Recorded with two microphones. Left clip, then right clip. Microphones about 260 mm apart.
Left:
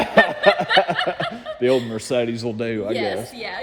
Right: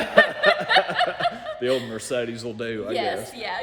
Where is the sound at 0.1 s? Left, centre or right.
Centre.